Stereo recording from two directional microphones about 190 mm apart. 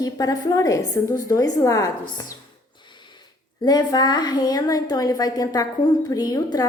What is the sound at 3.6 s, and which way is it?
A woman's voice, 20° left (ahead or behind).